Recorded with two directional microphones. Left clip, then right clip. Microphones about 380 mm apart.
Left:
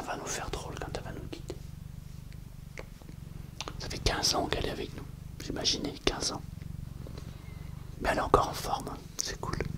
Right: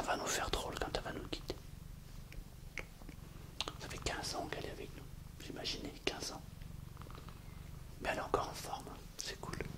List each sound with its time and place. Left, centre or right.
0.0 s whispering: centre
4.0 s speech: left
8.0 s speech: left